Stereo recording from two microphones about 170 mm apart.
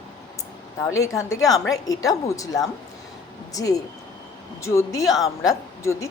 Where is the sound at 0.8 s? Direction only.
20° left (ahead or behind).